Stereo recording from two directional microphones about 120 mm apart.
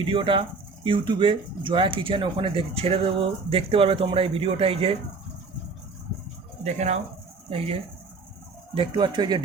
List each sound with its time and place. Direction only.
0.1 s speech: 45° right (ahead or behind)
6.7 s speech: 70° right (ahead or behind)
8.7 s speech: 40° right (ahead or behind)